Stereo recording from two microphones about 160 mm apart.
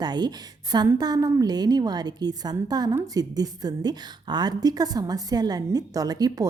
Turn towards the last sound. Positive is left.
turn(degrees=-25)  # may be behind; listen again after turning